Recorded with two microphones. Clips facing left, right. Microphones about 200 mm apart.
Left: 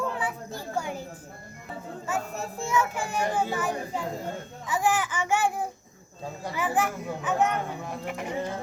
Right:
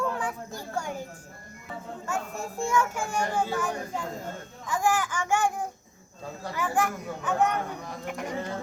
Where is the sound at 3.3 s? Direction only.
5° left (ahead or behind).